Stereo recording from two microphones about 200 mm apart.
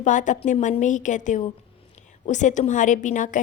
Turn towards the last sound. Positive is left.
turn(degrees=40)  # may be behind; listen again after turning